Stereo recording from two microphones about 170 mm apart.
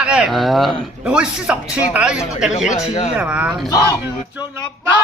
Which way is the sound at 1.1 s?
5° right (ahead or behind).